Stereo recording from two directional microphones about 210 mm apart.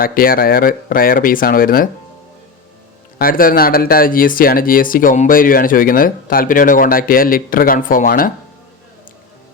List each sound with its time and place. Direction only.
0.0 s speech: 45° left (ahead or behind)
3.2 s speech: 40° left (ahead or behind)